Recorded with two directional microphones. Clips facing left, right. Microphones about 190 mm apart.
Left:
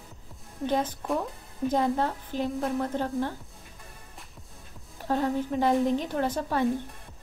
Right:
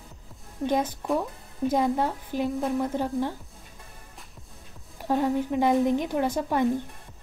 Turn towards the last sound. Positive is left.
turn(degrees=-10)  # may be behind; listen again after turning